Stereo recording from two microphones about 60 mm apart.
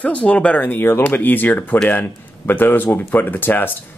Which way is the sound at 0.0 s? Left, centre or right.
Left.